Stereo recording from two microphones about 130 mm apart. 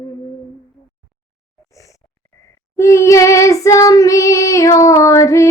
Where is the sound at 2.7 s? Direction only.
20° left (ahead or behind).